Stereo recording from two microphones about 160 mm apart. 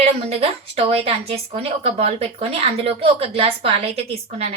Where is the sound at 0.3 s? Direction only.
40° right (ahead or behind).